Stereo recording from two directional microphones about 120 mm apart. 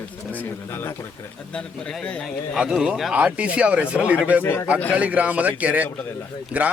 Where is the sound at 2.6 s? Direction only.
5° right (ahead or behind).